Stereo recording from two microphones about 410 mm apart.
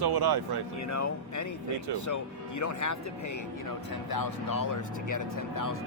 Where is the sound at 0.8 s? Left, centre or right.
Left.